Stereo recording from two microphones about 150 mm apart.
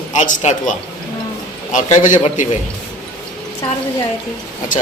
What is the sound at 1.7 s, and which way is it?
Speech, 55° left (ahead or behind).